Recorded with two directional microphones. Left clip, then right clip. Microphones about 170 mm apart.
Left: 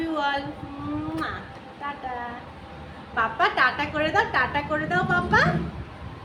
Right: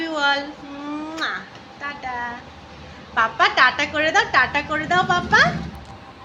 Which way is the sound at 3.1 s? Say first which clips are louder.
Right 5 dB; 30° right (ahead or behind).